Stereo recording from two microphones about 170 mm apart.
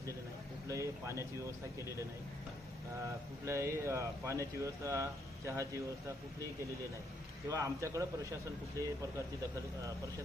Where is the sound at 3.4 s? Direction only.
15° right (ahead or behind).